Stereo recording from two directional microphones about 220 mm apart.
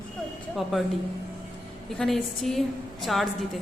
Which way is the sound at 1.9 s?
Centre (ahead or behind).